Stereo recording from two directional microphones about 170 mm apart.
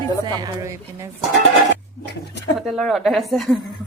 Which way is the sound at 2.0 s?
80° left.